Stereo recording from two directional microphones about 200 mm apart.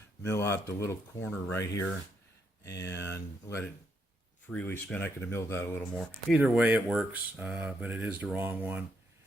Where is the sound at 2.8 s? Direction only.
60° left (ahead or behind).